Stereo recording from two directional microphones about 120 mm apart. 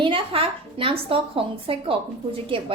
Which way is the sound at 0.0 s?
45° right (ahead or behind).